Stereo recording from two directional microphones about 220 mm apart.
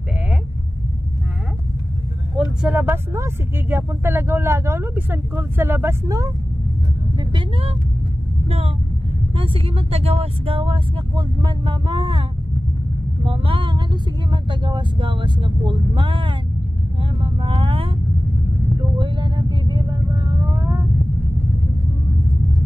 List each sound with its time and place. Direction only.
2.6 s speech: 10° right (ahead or behind)
7.2 s vehicle: 25° right (ahead or behind)
8.5 s speech: 25° right (ahead or behind)
17.0 s vehicle: 25° right (ahead or behind)
18.9 s vehicle: 20° right (ahead or behind)